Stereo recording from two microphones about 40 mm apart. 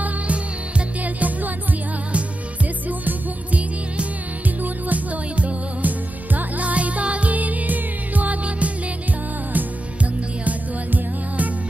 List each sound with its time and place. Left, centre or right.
0.0 s music: right
4.8 s music: right
10.4 s music: right